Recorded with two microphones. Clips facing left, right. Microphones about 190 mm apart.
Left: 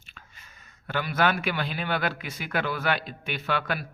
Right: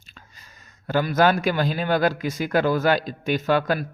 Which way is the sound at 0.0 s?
35° right (ahead or behind).